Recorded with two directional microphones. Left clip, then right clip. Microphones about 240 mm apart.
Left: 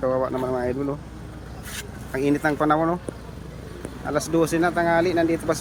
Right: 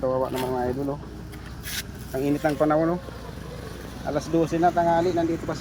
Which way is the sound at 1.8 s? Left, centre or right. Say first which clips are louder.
Left 2 dB; centre.